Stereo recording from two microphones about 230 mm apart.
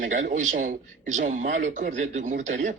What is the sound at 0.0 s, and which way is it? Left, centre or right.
Speech, right.